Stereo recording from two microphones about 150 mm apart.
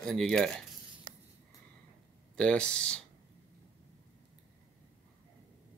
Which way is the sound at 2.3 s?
5° left (ahead or behind).